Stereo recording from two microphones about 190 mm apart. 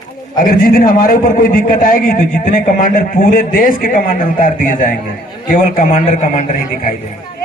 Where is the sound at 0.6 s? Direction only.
50° left (ahead or behind).